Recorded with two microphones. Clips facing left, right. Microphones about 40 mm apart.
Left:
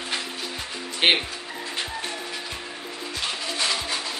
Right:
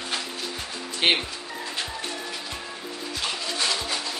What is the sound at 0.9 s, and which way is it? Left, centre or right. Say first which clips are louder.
Speech: left 2 dB; centre.